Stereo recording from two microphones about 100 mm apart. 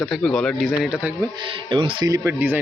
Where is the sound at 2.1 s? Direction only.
25° right (ahead or behind).